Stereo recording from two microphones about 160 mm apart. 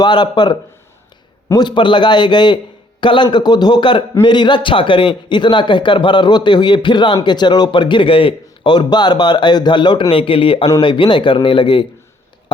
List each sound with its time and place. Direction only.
0.0 s speech: 25° left (ahead or behind)